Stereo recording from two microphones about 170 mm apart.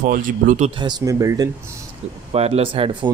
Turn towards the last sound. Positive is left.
turn(degrees=-30)  # may be behind; listen again after turning